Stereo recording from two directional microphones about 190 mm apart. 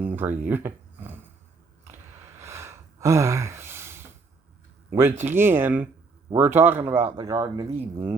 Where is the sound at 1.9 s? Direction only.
10° right (ahead or behind).